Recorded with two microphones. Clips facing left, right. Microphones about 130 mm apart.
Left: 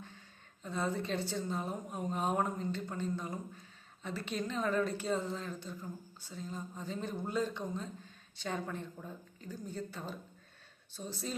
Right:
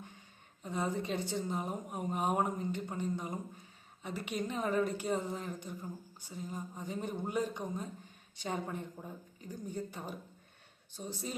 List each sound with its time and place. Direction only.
0.6 s a woman's voice: 15° right (ahead or behind)